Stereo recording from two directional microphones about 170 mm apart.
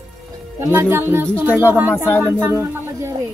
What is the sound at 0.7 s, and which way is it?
Speech, 10° right (ahead or behind).